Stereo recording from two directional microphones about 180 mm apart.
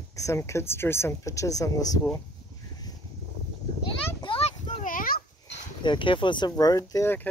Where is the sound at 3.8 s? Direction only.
30° left (ahead or behind); by 5.2 s 50° left (ahead or behind).